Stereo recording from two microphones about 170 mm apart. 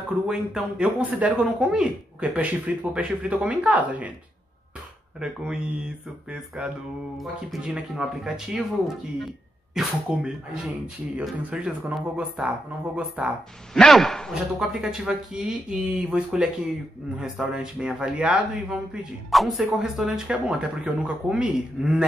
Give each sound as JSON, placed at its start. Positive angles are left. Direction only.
{"t": 0.3, "sound": "speech", "side_deg": -5}
{"t": 5.2, "sound": "speech", "side_deg": -5}
{"t": 7.2, "sound": "speech", "side_deg": -5}